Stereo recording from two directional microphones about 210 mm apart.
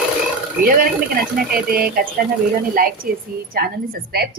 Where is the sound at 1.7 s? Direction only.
45° right (ahead or behind).